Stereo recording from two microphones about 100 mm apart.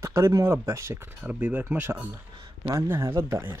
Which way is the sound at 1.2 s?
15° right (ahead or behind).